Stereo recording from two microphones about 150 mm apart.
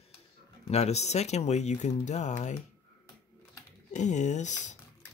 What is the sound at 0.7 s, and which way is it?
Speech, 45° left (ahead or behind).